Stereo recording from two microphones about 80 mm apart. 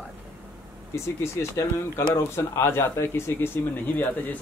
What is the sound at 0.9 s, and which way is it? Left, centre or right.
Speech, left.